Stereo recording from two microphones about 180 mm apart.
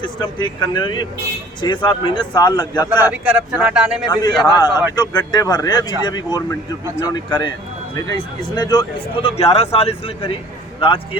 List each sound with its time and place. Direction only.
0.0 s speech: 25° left (ahead or behind)
2.9 s speech: 10° right (ahead or behind)
4.1 s speech: 20° left (ahead or behind)
4.7 s a man's voice: 10° right (ahead or behind)
4.9 s speech: 20° left (ahead or behind)